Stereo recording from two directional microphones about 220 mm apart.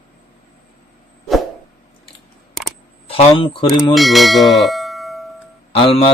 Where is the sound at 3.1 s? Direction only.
25° left (ahead or behind).